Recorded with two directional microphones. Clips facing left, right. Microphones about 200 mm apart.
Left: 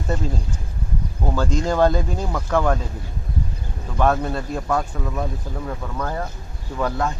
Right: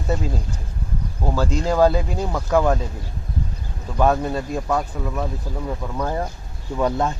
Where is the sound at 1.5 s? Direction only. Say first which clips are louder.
Right 1 dB; 10° right (ahead or behind).